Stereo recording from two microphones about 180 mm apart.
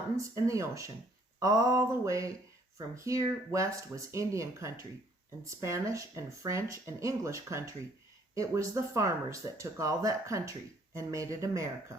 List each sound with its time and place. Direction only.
0.2 s speech: 15° right (ahead or behind)
1.4 s a sound: 20° right (ahead or behind)
2.7 s speech: 15° right (ahead or behind)